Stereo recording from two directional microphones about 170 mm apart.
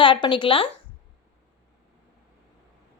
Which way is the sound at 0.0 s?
30° left (ahead or behind).